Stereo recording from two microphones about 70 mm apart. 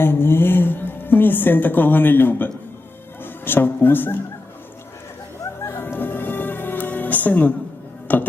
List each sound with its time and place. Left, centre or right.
0.0 s a woman's voice: left
5.6 s music: left